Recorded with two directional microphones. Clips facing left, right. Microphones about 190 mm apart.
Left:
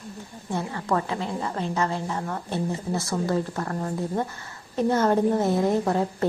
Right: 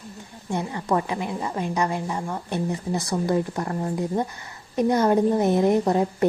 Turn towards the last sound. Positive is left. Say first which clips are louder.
# right 3 dB
turn(degrees=-15)  # may be behind; listen again after turning